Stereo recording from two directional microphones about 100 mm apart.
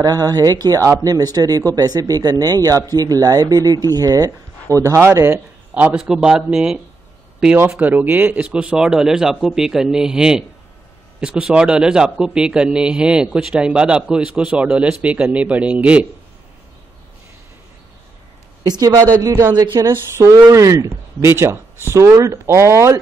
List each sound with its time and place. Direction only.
0.0 s speech: 40° right (ahead or behind)
5.8 s a man's voice: 10° right (ahead or behind)
7.8 s a man's voice: 15° right (ahead or behind)
18.6 s speech: 40° right (ahead or behind)